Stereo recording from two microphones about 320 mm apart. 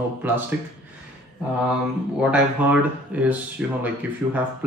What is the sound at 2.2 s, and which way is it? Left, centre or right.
Speech, centre.